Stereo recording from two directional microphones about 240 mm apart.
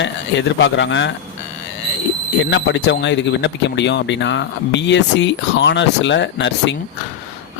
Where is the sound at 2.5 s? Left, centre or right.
Left.